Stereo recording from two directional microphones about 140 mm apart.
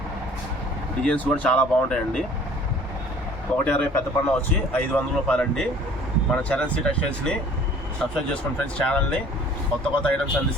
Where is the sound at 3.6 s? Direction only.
10° left (ahead or behind).